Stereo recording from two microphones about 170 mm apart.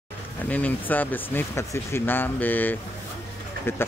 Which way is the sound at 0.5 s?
10° left (ahead or behind).